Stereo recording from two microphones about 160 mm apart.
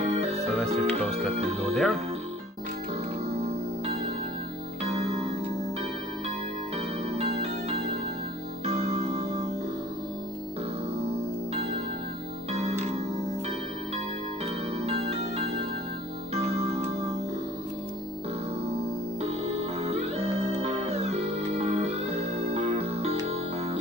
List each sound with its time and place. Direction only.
0.0 s music: 40° right (ahead or behind)
1.3 s speech: 40° right (ahead or behind)
1.7 s speech: centre (ahead or behind)
3.3 s music: 40° right (ahead or behind)
7.2 s music: 40° right (ahead or behind)
11.0 s music: 40° right (ahead or behind)
14.4 s music: 40° right (ahead or behind)
18.7 s music: 40° right (ahead or behind)